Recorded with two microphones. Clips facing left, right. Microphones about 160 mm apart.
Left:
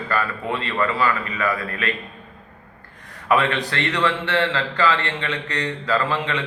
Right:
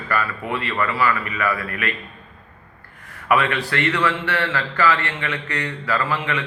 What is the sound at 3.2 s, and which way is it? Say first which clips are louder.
A man's voice: even; 20° left (ahead or behind).